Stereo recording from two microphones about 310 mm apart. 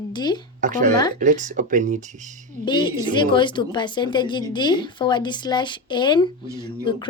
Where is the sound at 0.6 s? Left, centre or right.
Right.